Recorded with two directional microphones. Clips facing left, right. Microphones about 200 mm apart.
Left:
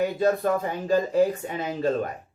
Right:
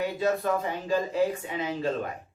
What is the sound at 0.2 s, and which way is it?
Speech, 45° left (ahead or behind).